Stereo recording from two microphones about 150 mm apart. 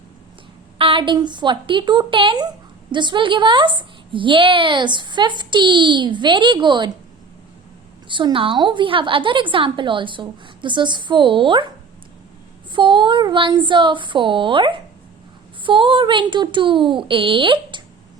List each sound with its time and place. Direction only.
0.8 s a woman's voice: 35° right (ahead or behind)
8.0 s a woman's voice: 35° right (ahead or behind)
12.7 s a woman's voice: 30° right (ahead or behind)